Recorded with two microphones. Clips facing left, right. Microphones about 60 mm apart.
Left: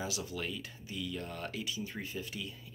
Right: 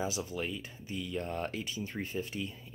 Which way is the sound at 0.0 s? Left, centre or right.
Right.